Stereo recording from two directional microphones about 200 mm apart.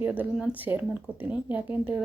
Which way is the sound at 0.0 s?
10° right (ahead or behind).